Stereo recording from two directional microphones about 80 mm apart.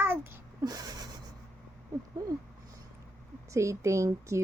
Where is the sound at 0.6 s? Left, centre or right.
Right.